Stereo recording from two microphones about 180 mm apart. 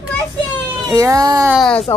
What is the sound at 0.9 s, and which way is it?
Speech, 20° right (ahead or behind).